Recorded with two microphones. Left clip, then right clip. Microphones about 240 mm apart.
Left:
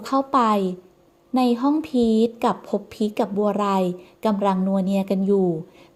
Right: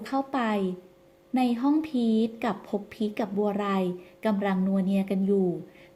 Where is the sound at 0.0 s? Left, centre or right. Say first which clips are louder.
Left 9 dB; left.